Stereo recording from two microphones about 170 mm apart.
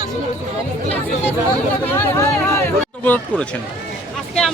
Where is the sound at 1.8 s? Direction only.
15° left (ahead or behind).